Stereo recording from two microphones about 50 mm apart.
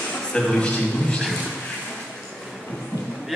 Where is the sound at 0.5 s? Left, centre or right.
Left.